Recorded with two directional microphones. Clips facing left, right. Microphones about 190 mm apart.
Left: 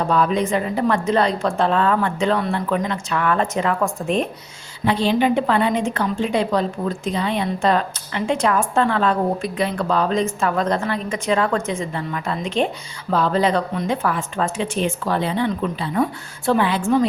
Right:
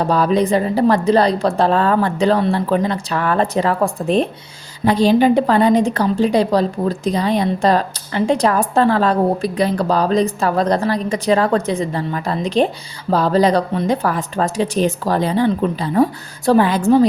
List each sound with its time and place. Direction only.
0.0 s a woman's voice: 35° right (ahead or behind)